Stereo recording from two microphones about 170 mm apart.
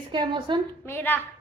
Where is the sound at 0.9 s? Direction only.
10° left (ahead or behind).